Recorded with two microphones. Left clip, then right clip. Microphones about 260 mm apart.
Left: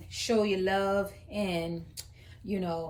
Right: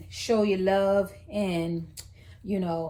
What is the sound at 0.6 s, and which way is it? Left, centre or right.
A woman's voice, centre.